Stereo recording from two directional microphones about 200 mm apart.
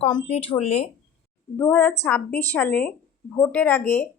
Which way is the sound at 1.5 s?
10° left (ahead or behind).